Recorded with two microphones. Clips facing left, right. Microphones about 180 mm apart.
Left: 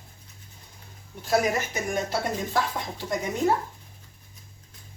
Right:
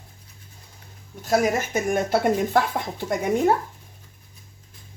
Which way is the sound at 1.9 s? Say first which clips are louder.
Right 7 dB; 55° right (ahead or behind).